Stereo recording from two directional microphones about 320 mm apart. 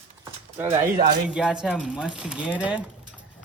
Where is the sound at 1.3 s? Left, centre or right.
Centre.